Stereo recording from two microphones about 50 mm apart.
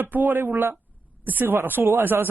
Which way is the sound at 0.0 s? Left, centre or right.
Right.